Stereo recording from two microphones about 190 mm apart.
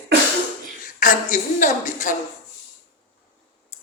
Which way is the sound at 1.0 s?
45° left (ahead or behind).